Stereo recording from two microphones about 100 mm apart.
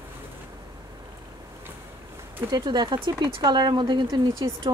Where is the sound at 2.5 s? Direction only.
45° right (ahead or behind).